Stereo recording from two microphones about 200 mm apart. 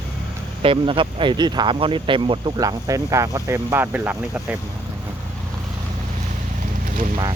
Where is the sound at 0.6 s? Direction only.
25° right (ahead or behind); by 4.5 s 10° right (ahead or behind).